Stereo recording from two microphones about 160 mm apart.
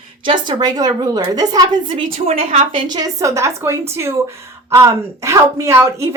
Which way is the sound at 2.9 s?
20° right (ahead or behind).